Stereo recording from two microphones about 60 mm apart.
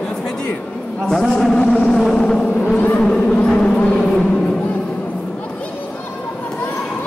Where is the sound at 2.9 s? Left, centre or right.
Centre.